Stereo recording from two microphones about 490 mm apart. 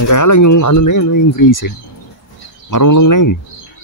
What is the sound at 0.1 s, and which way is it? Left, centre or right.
Speech, left.